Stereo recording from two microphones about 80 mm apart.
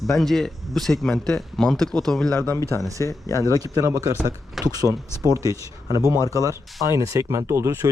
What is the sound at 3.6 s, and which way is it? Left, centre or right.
Speech, right.